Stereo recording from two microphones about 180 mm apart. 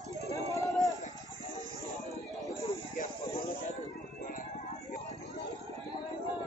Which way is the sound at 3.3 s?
30° left (ahead or behind).